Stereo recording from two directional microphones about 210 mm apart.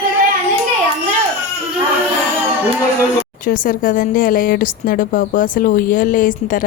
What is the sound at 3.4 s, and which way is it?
Speech, 40° left (ahead or behind).